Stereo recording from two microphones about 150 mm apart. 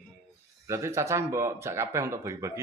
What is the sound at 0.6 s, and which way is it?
Speech, 20° right (ahead or behind).